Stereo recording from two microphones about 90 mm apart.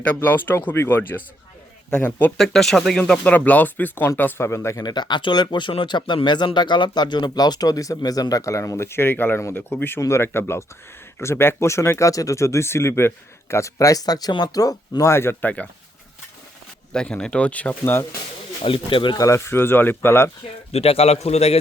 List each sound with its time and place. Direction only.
0.0 s speech: 20° left (ahead or behind)
2.4 s speech: 5° left (ahead or behind); by 4.8 s 30° left (ahead or behind)
4.8 s speech: 50° left (ahead or behind)
15.1 s speech: 25° left (ahead or behind)
16.9 s speech: 10° left (ahead or behind)
18.6 s speech: 75° left (ahead or behind)
19.1 s speech: 35° left (ahead or behind)